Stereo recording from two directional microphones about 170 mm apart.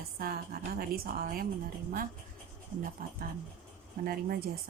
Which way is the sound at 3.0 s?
55° right (ahead or behind).